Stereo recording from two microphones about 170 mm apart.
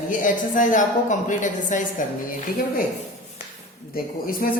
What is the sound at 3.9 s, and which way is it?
Speech, 60° left (ahead or behind).